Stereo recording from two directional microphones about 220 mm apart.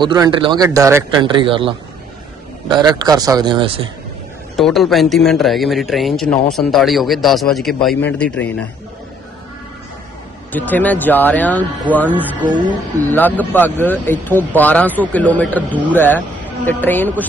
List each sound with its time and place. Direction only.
0.0 s a man's voice: 20° right (ahead or behind)
4.6 s a man's voice: centre (ahead or behind)
10.5 s speech: 10° left (ahead or behind)
11.9 s speech: 5° right (ahead or behind)
13.1 s speech: 10° left (ahead or behind)